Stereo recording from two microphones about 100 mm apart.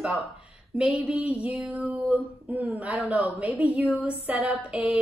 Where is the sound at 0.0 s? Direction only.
Centre (ahead or behind).